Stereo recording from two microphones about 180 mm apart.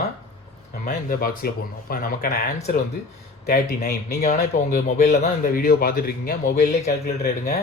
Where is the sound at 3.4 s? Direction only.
55° left (ahead or behind).